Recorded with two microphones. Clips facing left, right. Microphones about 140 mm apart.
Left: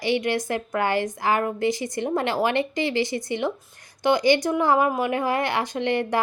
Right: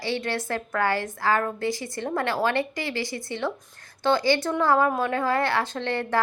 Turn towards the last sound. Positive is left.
turn(degrees=15)  # may be behind; listen again after turning